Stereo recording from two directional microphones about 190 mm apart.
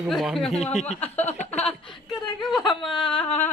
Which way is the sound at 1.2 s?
35° left (ahead or behind).